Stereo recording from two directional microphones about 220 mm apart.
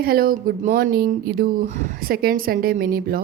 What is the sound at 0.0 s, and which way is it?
Speech, 45° right (ahead or behind).